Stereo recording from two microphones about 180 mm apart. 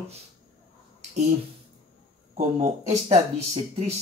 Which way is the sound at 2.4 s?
35° right (ahead or behind).